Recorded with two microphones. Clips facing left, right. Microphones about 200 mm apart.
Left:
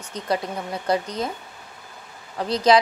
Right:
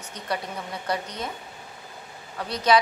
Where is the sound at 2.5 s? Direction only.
35° left (ahead or behind).